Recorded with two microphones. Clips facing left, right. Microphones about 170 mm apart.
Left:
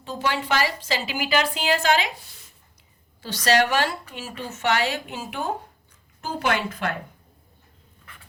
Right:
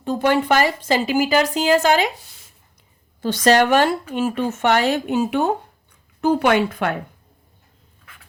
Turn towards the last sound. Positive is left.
turn(degrees=-60)  # may be behind; listen again after turning